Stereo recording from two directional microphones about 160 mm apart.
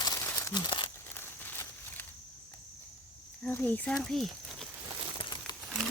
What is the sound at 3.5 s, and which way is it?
Speech, 10° left (ahead or behind).